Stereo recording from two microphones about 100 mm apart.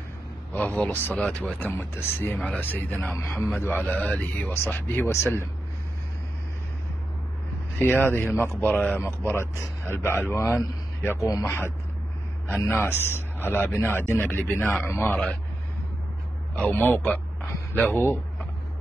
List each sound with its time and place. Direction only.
0.5 s a man's voice: 15° left (ahead or behind)
7.8 s a man's voice: 20° left (ahead or behind)
16.5 s a man's voice: 15° left (ahead or behind)